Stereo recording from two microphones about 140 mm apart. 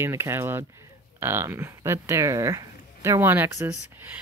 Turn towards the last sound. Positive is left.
turn(degrees=-15)  # may be behind; listen again after turning